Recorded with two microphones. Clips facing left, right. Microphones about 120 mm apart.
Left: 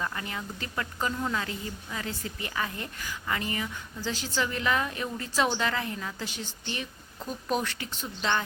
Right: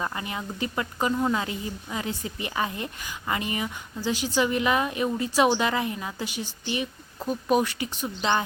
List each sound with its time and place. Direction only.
0.0 s speech: 20° right (ahead or behind)